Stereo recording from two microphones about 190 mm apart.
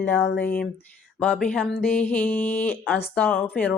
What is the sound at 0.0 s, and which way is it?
Speech, 10° left (ahead or behind).